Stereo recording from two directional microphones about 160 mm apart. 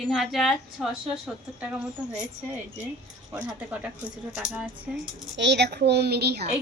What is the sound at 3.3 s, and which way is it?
A woman's voice, 5° right (ahead or behind).